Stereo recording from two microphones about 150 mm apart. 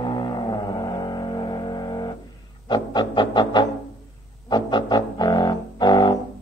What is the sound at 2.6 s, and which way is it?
Music, 30° left (ahead or behind).